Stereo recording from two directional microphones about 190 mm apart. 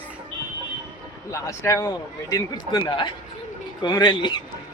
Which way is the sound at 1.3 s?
15° left (ahead or behind).